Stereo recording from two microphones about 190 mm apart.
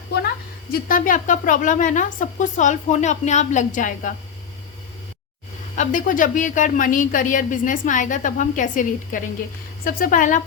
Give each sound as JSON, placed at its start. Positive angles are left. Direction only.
{"t": 0.7, "sound": "a woman's voice", "side_deg": 45}
{"t": 5.7, "sound": "a woman's voice", "side_deg": 45}